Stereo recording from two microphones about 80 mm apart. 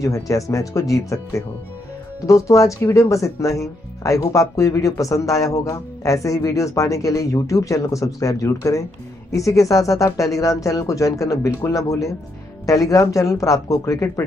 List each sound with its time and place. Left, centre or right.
0.0 s speech: left